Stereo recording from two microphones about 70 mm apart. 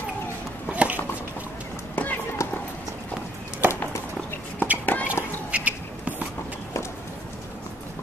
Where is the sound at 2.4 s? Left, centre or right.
Left.